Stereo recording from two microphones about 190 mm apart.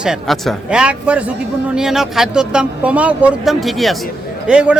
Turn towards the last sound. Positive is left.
turn(degrees=-5)  # may be behind; listen again after turning